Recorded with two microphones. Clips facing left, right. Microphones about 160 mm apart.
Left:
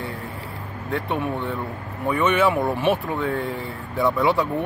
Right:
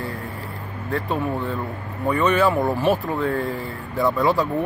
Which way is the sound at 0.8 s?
Centre (ahead or behind).